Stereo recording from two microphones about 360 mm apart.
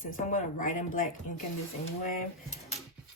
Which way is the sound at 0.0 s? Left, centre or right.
Left.